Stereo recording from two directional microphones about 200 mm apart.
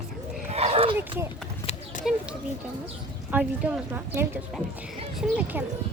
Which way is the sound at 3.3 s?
5° right (ahead or behind).